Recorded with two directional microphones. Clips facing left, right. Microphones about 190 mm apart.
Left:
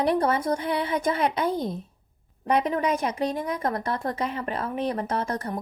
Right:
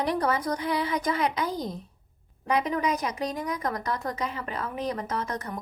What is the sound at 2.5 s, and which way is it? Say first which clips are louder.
Speech: left 3 dB; 30° left (ahead or behind).